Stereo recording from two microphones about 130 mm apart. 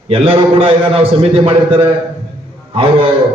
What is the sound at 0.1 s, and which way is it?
A man's voice, 45° right (ahead or behind).